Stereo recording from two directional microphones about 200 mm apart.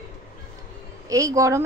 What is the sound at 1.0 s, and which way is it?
Speech, 15° right (ahead or behind).